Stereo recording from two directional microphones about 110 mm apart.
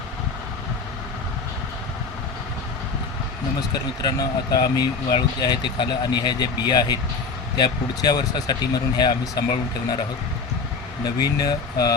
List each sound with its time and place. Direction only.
4.0 s speech: 35° left (ahead or behind)
11.0 s speech: 35° left (ahead or behind)